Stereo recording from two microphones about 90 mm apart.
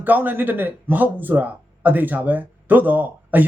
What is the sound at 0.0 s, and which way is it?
Speech, 20° right (ahead or behind).